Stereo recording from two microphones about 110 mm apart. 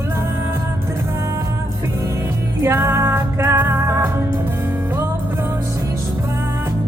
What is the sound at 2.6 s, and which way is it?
Music, 25° right (ahead or behind).